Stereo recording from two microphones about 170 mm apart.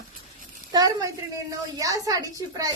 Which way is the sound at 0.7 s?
20° right (ahead or behind).